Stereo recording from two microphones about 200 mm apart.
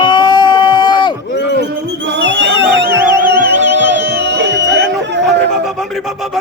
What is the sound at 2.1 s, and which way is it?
Music, 60° right (ahead or behind).